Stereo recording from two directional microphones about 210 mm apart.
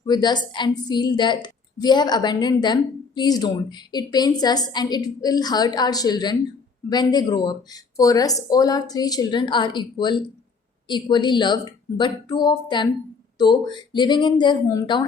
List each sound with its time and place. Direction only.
0.0 s speech: 20° left (ahead or behind)